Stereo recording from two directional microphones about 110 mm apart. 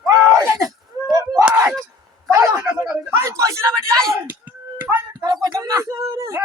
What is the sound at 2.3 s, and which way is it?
Speech, 20° right (ahead or behind).